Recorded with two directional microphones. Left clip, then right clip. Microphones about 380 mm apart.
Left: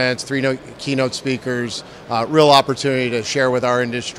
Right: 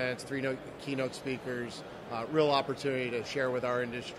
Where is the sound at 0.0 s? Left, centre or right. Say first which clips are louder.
Left 15 dB; left.